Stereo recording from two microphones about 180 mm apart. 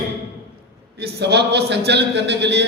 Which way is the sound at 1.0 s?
65° right (ahead or behind).